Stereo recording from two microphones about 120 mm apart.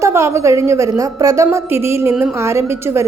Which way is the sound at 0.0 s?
25° right (ahead or behind).